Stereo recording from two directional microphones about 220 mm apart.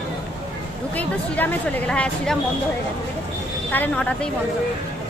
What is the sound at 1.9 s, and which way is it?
Speech, 5° left (ahead or behind).